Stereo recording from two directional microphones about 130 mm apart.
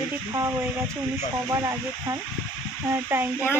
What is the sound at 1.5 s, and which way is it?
A woman's voice, 25° right (ahead or behind).